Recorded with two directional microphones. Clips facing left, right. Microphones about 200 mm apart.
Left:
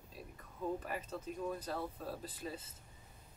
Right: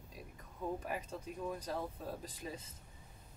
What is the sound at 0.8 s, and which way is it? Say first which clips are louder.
Speech: even; 10° right (ahead or behind).